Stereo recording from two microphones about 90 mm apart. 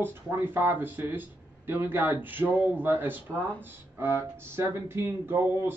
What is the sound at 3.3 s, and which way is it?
Speech, 15° left (ahead or behind).